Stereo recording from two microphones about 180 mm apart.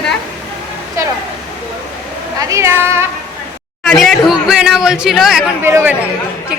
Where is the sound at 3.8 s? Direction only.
Centre (ahead or behind).